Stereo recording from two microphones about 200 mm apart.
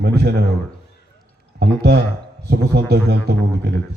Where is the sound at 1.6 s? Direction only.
55° right (ahead or behind).